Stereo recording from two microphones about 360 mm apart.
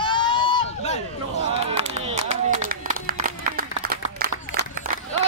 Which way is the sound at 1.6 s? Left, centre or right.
Centre.